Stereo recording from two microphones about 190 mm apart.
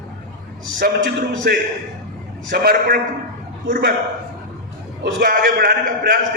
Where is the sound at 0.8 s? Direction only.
55° right (ahead or behind).